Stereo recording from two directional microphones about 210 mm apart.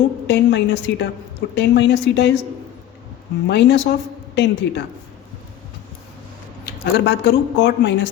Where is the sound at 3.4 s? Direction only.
55° left (ahead or behind).